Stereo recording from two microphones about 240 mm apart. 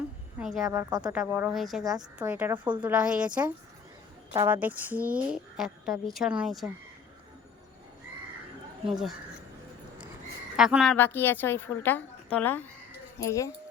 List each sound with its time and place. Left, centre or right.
0.3 s a woman's voice: centre
0.7 s a woman's voice: centre
10.6 s a woman's voice: centre
10.9 s a woman's voice: centre